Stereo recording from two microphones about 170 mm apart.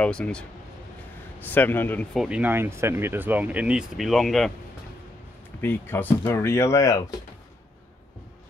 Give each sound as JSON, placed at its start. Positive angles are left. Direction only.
{"t": 0.0, "sound": "speech", "side_deg": 5}
{"t": 2.1, "sound": "speech", "side_deg": -5}
{"t": 5.6, "sound": "speech", "side_deg": 10}